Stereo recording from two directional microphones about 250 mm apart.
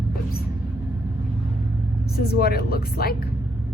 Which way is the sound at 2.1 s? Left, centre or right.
Left.